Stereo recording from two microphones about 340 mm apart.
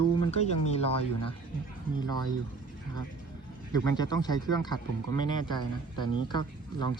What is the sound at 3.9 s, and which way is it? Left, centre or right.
Speech, centre.